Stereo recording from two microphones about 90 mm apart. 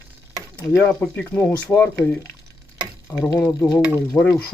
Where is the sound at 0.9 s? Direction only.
20° left (ahead or behind).